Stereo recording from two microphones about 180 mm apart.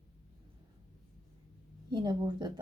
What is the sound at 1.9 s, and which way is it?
Speech, 25° right (ahead or behind).